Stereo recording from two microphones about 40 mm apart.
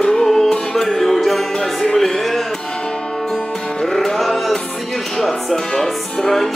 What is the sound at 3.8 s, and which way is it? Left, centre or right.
Music, centre.